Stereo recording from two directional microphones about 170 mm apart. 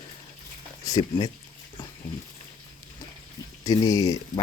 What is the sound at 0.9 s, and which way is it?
Speech, 20° left (ahead or behind).